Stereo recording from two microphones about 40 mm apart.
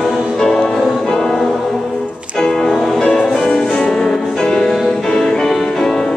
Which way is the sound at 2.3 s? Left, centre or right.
Centre.